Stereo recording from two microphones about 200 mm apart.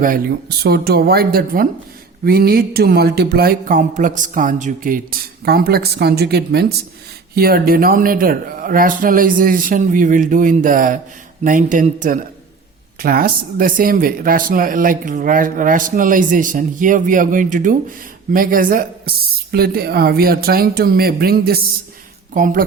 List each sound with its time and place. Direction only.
0.0 s a man's voice: 50° right (ahead or behind)